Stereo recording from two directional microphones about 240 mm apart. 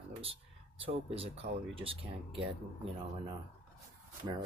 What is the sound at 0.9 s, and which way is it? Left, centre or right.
Speech, right.